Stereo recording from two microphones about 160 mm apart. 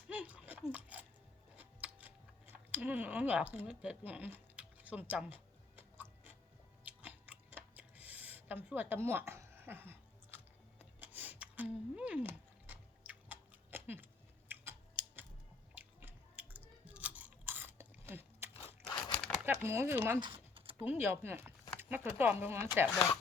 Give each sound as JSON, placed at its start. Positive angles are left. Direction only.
{"t": 0.1, "sound": "a sound", "side_deg": -10}
{"t": 5.7, "sound": "tick-tock", "side_deg": -10}
{"t": 6.8, "sound": "chewing", "side_deg": -10}
{"t": 11.0, "sound": "a sound", "side_deg": -10}
{"t": 15.7, "sound": "biting", "side_deg": -10}
{"t": 18.5, "sound": "crunch", "side_deg": 30}
{"t": 19.6, "sound": "speech", "side_deg": -15}
{"t": 20.1, "sound": "typing", "side_deg": -30}
{"t": 21.0, "sound": "speech", "side_deg": -15}